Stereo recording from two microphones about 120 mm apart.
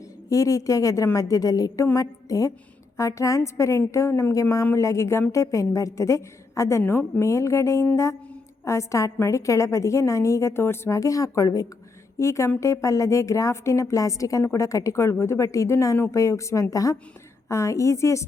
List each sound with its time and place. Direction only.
0.3 s a woman's voice: 25° left (ahead or behind)